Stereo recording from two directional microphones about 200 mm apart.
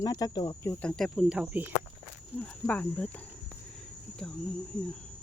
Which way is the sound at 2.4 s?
5° left (ahead or behind).